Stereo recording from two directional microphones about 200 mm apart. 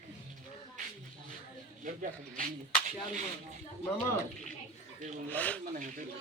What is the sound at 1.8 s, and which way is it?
Speech, 40° right (ahead or behind).